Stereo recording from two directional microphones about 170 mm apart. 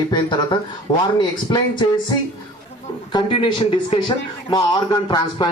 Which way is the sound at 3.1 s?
30° left (ahead or behind).